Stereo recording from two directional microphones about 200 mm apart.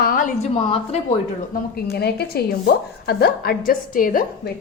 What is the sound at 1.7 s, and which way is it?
A woman's voice, 55° left (ahead or behind).